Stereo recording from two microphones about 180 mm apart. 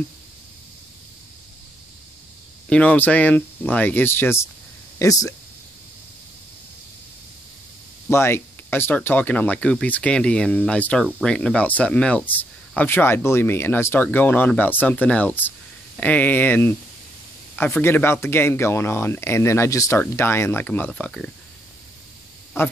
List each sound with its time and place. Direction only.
2.7 s speech: 5° left (ahead or behind)
8.1 s speech: 15° left (ahead or behind)
22.5 s speech: 15° left (ahead or behind)